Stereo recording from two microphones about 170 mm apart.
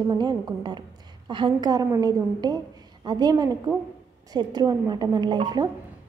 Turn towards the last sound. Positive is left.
turn(degrees=-25)  # may be behind; listen again after turning